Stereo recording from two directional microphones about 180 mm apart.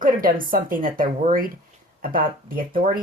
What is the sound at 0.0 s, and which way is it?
Speech, 50° right (ahead or behind).